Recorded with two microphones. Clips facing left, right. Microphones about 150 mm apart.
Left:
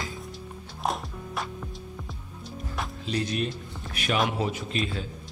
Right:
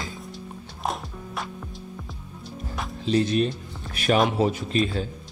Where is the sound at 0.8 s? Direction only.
Centre (ahead or behind).